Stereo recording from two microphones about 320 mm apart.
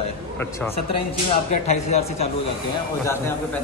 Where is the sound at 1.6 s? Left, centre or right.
Centre.